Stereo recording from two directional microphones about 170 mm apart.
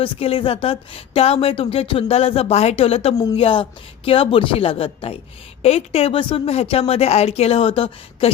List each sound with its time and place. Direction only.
0.0 s speech: 35° left (ahead or behind)